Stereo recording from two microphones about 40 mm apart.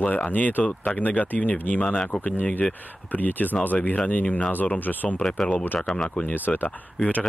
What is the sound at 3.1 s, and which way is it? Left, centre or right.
Speech, left.